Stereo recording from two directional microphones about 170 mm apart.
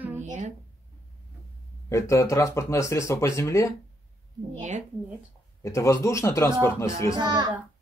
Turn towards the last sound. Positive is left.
turn(degrees=-25)  # may be behind; listen again after turning